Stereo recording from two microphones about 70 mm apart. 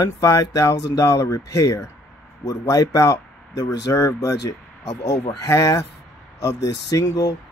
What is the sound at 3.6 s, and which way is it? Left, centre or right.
Speech, left.